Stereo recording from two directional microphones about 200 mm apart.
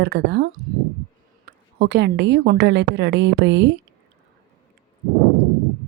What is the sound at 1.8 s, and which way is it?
Speech, 60° right (ahead or behind).